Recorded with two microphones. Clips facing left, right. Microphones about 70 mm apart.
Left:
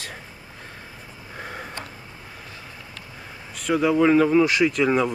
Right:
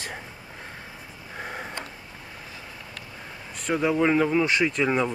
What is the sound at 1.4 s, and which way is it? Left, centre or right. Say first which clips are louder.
Sniff: even; centre.